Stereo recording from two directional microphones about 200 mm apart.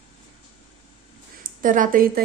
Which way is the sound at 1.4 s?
40° right (ahead or behind).